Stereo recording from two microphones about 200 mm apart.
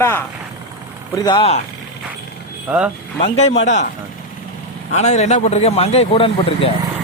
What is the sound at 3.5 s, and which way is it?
Speech, 65° left (ahead or behind).